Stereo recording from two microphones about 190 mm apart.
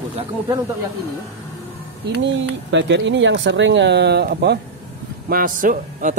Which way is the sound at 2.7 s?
70° right (ahead or behind).